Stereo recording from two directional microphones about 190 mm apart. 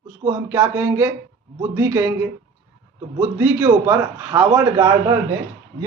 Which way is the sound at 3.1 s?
10° right (ahead or behind).